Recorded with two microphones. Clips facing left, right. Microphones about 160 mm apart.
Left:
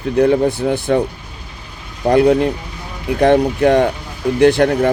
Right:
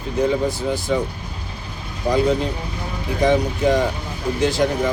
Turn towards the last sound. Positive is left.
turn(degrees=65)  # may be behind; listen again after turning